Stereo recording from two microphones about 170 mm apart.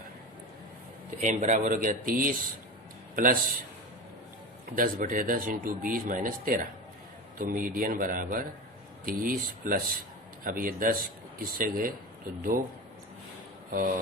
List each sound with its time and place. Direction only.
1.2 s speech: 45° right (ahead or behind)
4.7 s speech: 55° right (ahead or behind)
13.7 s speech: 55° right (ahead or behind)